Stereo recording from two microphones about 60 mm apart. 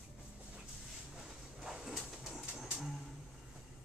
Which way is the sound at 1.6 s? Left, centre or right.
Centre.